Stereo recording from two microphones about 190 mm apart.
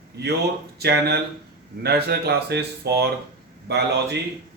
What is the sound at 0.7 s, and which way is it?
Speech, 60° right (ahead or behind).